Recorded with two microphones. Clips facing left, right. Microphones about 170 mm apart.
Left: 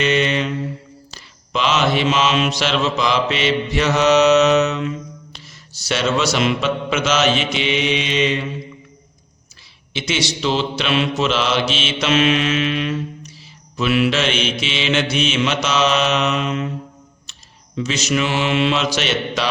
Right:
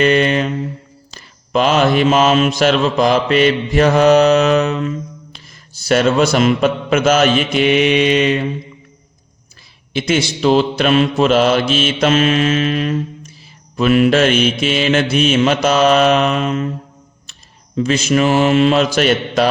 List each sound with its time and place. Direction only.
0.0 s mantra: 50° right (ahead or behind)
1.5 s mantra: 50° right (ahead or behind)
9.9 s mantra: 50° right (ahead or behind)
17.7 s mantra: 50° right (ahead or behind)